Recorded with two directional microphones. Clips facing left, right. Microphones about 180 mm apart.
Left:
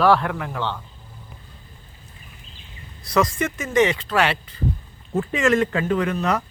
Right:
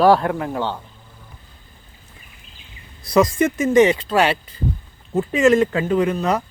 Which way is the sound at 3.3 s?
35° right (ahead or behind).